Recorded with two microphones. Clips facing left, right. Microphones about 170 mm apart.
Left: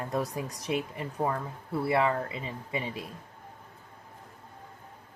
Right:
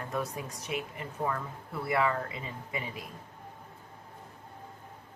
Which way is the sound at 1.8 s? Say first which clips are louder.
Left 2 dB; 30° left (ahead or behind).